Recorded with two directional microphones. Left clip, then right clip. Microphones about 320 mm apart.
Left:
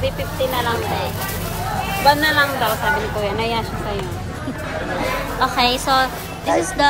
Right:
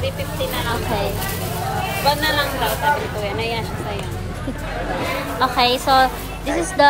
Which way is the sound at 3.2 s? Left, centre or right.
Left.